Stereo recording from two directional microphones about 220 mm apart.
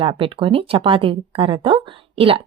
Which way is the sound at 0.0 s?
25° right (ahead or behind).